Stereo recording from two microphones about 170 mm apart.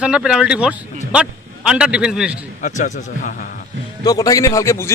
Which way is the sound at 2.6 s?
45° left (ahead or behind).